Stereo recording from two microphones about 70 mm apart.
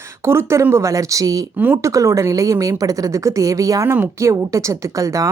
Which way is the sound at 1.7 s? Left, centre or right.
Right.